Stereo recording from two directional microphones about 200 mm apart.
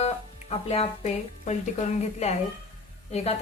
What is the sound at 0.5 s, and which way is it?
A woman's voice, 30° left (ahead or behind).